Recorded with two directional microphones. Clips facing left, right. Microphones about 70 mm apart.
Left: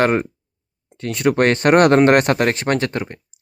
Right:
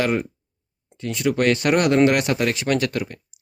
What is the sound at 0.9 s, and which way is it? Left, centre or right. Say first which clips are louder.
Speech: left 4 dB; left.